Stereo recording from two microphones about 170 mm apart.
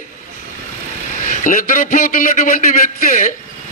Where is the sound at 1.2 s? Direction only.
50° left (ahead or behind).